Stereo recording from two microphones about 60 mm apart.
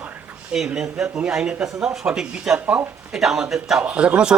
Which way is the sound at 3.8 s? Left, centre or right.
Right.